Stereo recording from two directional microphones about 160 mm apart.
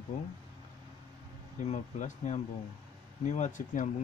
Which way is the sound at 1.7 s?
45° left (ahead or behind).